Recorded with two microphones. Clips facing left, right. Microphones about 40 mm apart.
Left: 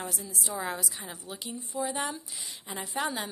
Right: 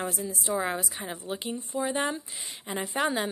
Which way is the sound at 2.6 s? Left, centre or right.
Right.